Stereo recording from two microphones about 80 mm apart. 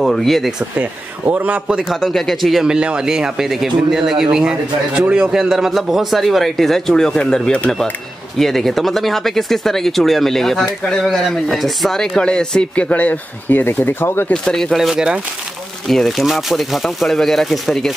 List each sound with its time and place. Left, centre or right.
0.0 s speech: centre
0.7 s speech: right
1.9 s a man's voice: centre; by 14.3 s left
14.3 s speech: centre
15.9 s speech: centre